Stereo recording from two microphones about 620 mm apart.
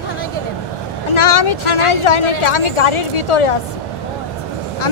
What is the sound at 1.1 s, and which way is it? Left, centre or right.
Vehicle, left.